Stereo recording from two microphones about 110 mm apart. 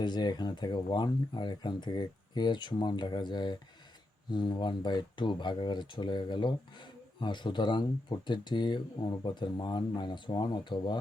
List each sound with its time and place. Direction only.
0.0 s speech: 40° left (ahead or behind)